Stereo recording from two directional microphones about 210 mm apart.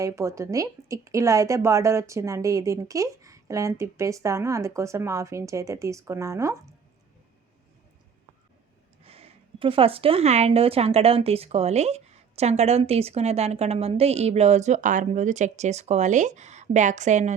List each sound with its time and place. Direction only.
0.0 s a woman's voice: 15° right (ahead or behind)
9.0 s a woman's voice: 30° right (ahead or behind)